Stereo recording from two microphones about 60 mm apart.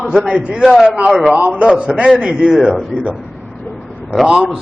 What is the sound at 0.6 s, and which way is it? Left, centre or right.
A man's voice, centre.